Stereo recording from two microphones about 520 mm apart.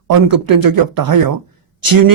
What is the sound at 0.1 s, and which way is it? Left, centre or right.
Speech, right.